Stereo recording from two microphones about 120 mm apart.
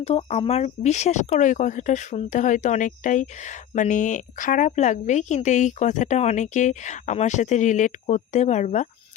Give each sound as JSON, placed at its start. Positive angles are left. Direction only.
{"t": 0.3, "sound": "speech", "side_deg": 60}